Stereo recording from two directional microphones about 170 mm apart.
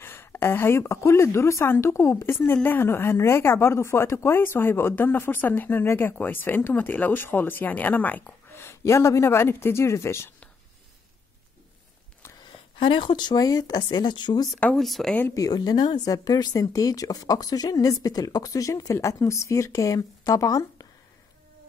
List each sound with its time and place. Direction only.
0.0 s a woman's voice: 15° left (ahead or behind)
12.7 s speech: 30° left (ahead or behind)
14.6 s speech: 5° left (ahead or behind)
15.2 s speech: 20° left (ahead or behind)